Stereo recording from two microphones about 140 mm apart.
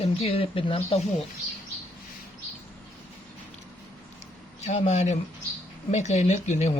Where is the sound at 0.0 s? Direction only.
45° left (ahead or behind).